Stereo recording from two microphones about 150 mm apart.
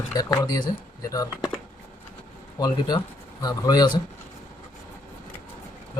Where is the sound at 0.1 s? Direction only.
25° left (ahead or behind).